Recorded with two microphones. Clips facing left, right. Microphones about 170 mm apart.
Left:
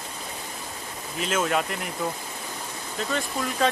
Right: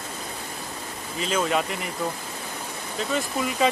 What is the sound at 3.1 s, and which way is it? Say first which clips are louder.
Speech: right 3 dB; 5° right (ahead or behind).